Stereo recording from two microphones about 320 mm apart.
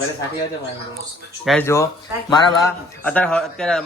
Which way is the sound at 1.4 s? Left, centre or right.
Centre.